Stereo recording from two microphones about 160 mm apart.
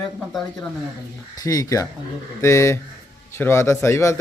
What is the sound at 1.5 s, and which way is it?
Speech, 20° left (ahead or behind).